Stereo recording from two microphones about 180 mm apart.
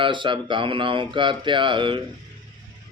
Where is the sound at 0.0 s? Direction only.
25° right (ahead or behind).